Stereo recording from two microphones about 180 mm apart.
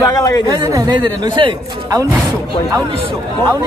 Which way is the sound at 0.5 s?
20° right (ahead or behind).